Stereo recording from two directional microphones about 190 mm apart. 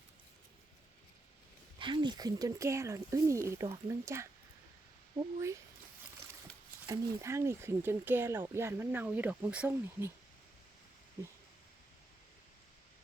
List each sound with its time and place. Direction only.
1.8 s speech: 25° right (ahead or behind)
6.8 s speech: 15° right (ahead or behind)